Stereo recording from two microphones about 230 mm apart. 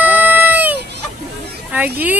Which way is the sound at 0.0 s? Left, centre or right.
Centre.